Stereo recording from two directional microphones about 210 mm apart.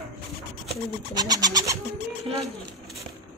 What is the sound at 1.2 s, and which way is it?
Bird, 20° right (ahead or behind).